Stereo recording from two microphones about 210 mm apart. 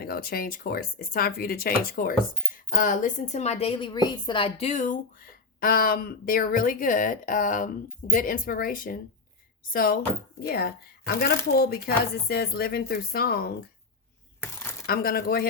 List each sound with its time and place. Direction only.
0.0 s speech: 45° left (ahead or behind)
14.8 s speech: 45° left (ahead or behind)